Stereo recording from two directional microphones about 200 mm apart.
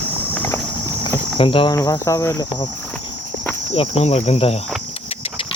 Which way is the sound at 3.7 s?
30° left (ahead or behind).